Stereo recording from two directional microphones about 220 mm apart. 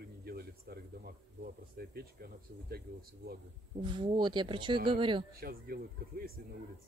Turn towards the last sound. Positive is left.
turn(degrees=-40)  # may be behind; listen again after turning